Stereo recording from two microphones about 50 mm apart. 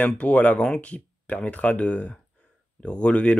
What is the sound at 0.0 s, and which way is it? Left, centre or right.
Speech, left.